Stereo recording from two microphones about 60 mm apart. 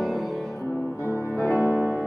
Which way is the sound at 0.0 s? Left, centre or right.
Centre.